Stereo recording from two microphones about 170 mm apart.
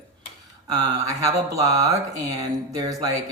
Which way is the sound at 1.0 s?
20° right (ahead or behind).